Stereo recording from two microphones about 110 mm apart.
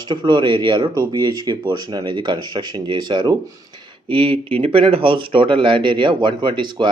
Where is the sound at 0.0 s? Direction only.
45° right (ahead or behind).